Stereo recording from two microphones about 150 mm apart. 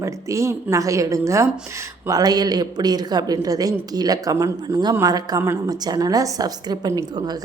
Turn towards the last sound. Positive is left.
turn(degrees=-25)  # may be behind; listen again after turning